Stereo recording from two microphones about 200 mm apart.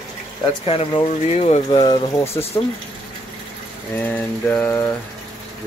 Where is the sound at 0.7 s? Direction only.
30° left (ahead or behind).